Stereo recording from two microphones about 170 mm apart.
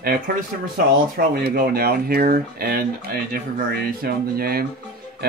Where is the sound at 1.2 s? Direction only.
65° right (ahead or behind).